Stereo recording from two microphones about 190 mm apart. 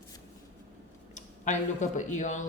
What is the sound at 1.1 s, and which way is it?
Speech, 40° left (ahead or behind).